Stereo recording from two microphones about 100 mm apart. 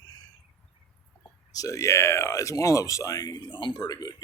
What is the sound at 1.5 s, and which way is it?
Speech, 35° left (ahead or behind).